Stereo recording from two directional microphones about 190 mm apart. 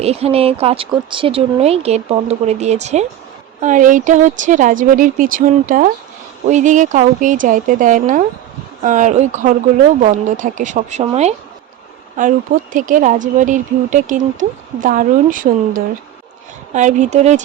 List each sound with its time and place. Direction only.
0.0 s speech: 30° right (ahead or behind)
12.2 s speech: 45° right (ahead or behind)